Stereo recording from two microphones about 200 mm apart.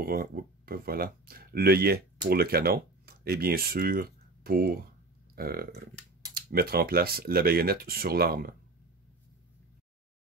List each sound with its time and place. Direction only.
0.0 s speech: 50° right (ahead or behind)